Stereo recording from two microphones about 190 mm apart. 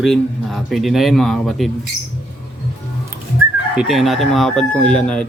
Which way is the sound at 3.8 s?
Centre (ahead or behind).